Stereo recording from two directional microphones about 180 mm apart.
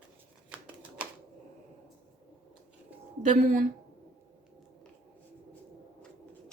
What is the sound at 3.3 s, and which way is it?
Speech, 45° right (ahead or behind).